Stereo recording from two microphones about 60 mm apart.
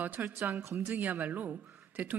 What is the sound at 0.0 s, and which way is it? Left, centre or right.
A man's voice, right.